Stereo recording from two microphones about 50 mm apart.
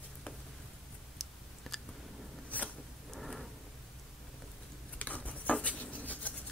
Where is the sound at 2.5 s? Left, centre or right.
Left.